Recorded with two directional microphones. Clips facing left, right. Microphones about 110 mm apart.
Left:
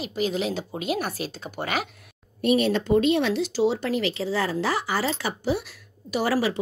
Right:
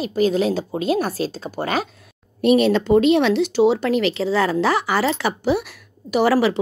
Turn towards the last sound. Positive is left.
turn(degrees=-80)